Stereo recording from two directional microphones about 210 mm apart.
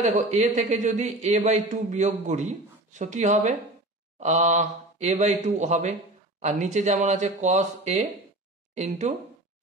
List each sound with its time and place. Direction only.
0.0 s speech: 35° right (ahead or behind)